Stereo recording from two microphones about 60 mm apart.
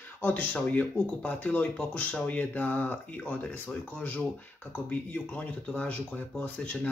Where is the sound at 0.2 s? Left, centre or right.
Left.